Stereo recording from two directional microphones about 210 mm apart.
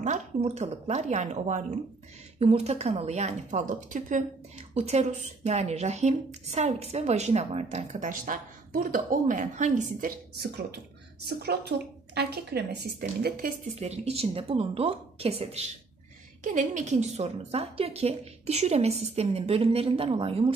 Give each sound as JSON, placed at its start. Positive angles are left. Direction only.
{"t": 0.0, "sound": "speech", "side_deg": -35}
{"t": 13.7, "sound": "a woman's voice", "side_deg": -30}